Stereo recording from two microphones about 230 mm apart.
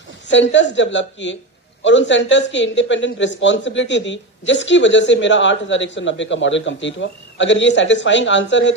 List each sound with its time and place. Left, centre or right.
0.3 s speech: left